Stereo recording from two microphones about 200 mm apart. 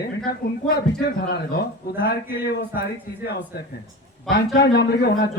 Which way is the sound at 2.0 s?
50° left (ahead or behind).